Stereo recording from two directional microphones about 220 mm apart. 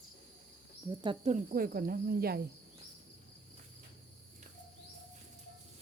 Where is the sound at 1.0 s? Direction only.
25° right (ahead or behind); by 2.4 s 45° right (ahead or behind).